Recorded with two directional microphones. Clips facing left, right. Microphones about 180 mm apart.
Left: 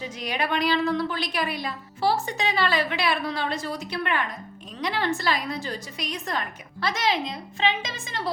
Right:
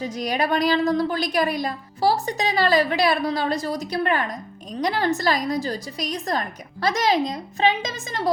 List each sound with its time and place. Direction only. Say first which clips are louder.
0.0 s a woman's voice: right 5 dB; 40° right (ahead or behind)